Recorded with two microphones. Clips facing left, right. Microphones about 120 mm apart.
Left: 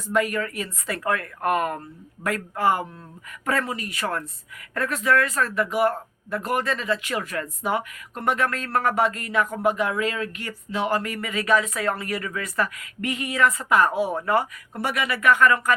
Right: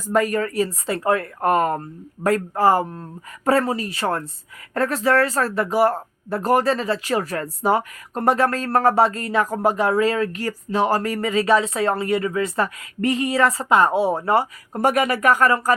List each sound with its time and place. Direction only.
0.1 s speech: 40° right (ahead or behind)
14.8 s speech: 45° right (ahead or behind)